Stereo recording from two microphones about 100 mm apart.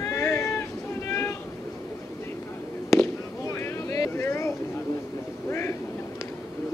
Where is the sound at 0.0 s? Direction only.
30° left (ahead or behind).